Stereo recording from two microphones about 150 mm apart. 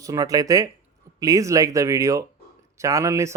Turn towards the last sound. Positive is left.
turn(degrees=-20)  # may be behind; listen again after turning